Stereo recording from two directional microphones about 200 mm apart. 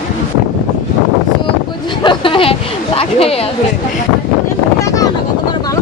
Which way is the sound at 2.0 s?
25° left (ahead or behind).